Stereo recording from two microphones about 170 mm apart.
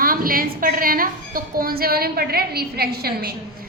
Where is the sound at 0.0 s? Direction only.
60° right (ahead or behind).